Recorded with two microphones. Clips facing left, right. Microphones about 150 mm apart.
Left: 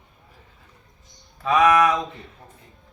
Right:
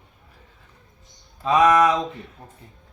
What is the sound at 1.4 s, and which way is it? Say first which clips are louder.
Speech: right 1 dB; 30° right (ahead or behind).